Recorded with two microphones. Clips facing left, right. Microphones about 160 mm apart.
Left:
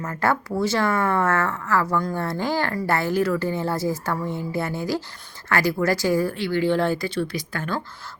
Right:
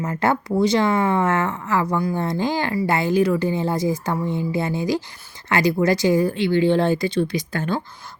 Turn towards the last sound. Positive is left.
turn(degrees=-25)  # may be behind; listen again after turning